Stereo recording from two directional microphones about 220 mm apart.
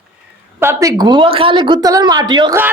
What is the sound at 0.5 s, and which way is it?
A woman's voice, 15° right (ahead or behind).